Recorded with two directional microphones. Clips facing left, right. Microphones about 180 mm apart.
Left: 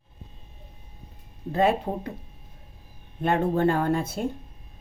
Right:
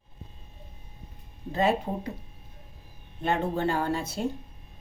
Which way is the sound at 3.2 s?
50° left (ahead or behind).